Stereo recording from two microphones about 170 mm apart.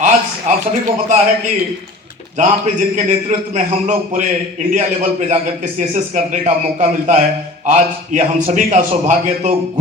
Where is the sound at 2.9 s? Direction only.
45° right (ahead or behind).